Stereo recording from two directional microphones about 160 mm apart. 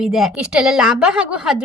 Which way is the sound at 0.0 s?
Centre (ahead or behind).